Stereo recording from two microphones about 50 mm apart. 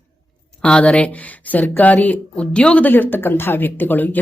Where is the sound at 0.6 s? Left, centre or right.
Centre.